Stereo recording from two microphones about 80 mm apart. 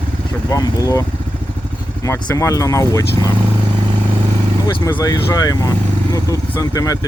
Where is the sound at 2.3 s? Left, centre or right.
Left.